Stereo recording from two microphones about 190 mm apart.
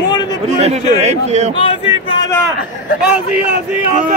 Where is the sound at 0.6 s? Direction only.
35° right (ahead or behind).